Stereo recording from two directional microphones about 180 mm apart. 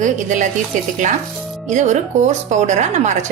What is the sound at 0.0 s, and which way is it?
Speech, 45° right (ahead or behind).